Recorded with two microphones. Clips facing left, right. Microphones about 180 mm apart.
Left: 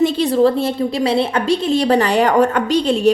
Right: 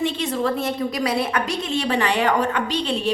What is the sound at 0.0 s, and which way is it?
A woman's voice, 35° left (ahead or behind).